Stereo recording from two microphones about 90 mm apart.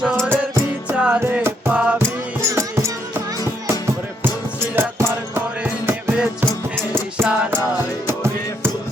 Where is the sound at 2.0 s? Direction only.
30° right (ahead or behind).